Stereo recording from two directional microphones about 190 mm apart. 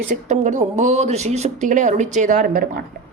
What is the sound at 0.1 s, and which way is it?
Speech, 40° right (ahead or behind).